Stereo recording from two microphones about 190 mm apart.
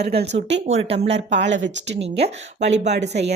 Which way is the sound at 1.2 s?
70° right (ahead or behind).